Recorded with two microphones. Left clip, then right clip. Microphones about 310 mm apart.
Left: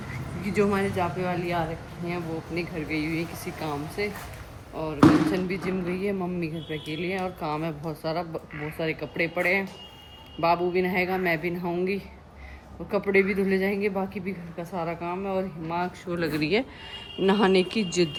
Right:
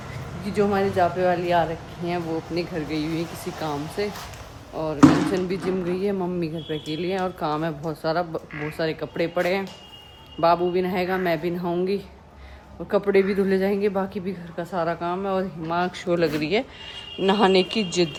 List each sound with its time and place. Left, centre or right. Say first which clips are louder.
0.5 s a woman's voice: right 3 dB; right
0.9 s speech: right 7 dB; centre
13.1 s speech: even; centre